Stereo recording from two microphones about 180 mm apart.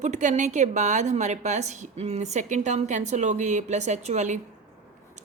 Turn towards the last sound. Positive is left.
turn(degrees=-40)  # may be behind; listen again after turning